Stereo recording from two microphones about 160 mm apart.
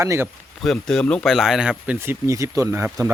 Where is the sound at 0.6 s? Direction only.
5° left (ahead or behind).